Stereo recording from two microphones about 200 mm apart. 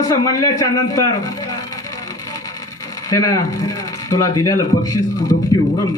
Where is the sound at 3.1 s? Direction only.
15° left (ahead or behind).